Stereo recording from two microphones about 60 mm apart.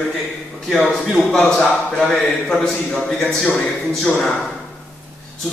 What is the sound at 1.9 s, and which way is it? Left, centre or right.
A man's voice, centre.